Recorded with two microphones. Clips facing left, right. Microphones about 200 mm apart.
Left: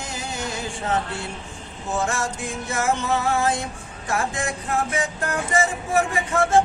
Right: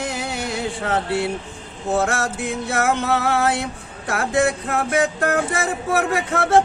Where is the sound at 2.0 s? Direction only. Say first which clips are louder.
Even; 65° right (ahead or behind).